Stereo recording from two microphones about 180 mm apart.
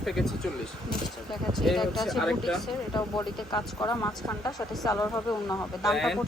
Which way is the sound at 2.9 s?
25° left (ahead or behind).